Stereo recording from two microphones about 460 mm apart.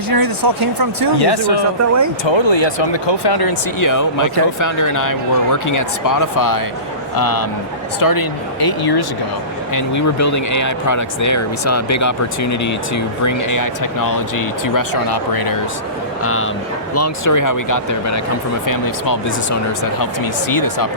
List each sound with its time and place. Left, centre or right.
0.1 s speech: right
1.2 s speech: left
1.8 s speech: right
2.2 s speech: left
9.7 s speech: left
16.2 s a sound: left
16.9 s speech: left
20.5 s speech: left